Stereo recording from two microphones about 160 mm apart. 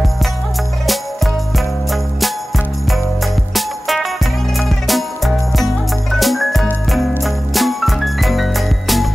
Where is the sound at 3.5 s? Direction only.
Centre (ahead or behind).